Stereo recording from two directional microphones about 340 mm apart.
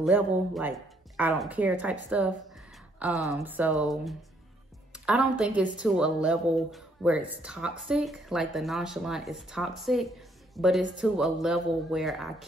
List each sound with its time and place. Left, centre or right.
0.0 s speech: centre